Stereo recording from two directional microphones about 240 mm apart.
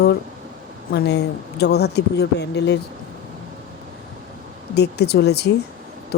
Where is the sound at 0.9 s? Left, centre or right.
Left.